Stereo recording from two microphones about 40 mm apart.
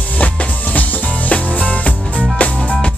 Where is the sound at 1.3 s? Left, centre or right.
Left.